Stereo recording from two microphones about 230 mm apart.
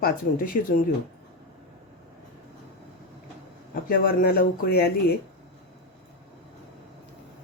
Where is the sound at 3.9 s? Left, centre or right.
Left.